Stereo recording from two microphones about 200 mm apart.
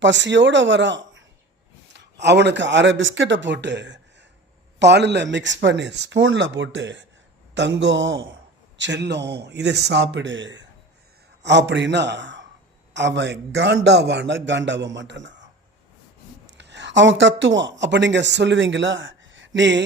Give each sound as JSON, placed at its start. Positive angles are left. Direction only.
{"t": 0.0, "sound": "a man's voice", "side_deg": -65}
{"t": 16.5, "sound": "speech", "side_deg": -60}